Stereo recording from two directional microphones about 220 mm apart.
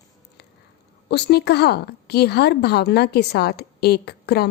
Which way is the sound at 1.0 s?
50° left (ahead or behind).